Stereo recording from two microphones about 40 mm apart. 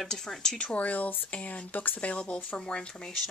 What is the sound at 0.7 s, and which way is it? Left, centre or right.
Speech, left.